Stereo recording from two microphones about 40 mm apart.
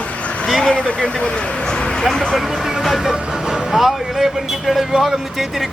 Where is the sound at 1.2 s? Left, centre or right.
Left.